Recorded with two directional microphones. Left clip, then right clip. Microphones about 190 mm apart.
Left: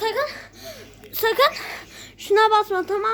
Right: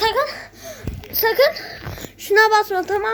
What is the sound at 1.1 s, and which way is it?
Speech, 35° left (ahead or behind).